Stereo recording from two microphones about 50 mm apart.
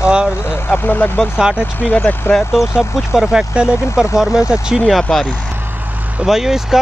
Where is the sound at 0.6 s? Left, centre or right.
Left.